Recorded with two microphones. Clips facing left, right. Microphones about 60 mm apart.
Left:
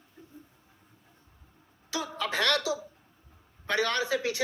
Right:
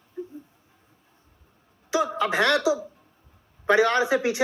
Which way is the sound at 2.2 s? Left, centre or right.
Right.